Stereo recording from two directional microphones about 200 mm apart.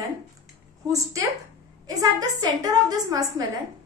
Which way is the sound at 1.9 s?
20° right (ahead or behind).